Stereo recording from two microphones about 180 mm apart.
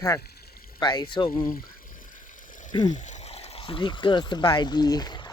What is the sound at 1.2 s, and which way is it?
Speech, 55° left (ahead or behind).